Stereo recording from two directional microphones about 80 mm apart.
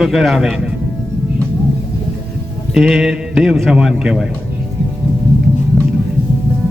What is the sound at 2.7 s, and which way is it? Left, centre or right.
A man's voice, centre.